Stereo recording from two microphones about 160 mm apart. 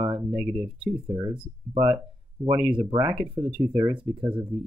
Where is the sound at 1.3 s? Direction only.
35° right (ahead or behind).